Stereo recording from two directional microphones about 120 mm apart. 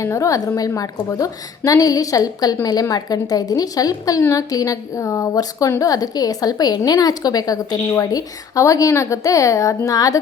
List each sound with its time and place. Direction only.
0.0 s a woman's voice: 25° left (ahead or behind)